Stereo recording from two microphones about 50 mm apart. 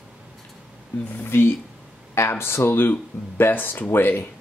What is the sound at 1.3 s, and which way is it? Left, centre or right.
Speech, left.